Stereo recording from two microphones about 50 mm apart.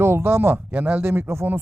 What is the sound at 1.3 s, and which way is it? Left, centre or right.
Speech, right.